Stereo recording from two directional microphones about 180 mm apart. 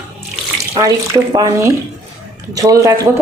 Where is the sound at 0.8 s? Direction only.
20° right (ahead or behind).